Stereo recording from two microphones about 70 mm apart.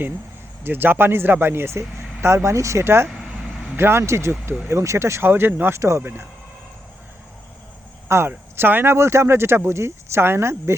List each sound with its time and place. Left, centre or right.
0.6 s speech: right
5.7 s speech: right
6.0 s speech: right
8.0 s speech: right